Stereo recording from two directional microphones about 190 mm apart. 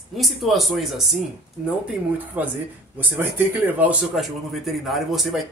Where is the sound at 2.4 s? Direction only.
10° right (ahead or behind).